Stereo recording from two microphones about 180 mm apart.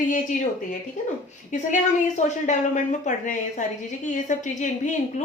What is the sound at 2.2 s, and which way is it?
Speech, 40° left (ahead or behind).